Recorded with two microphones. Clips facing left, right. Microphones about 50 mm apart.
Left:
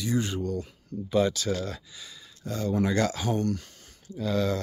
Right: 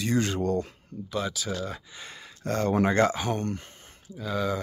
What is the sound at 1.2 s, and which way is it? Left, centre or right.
Speech, centre.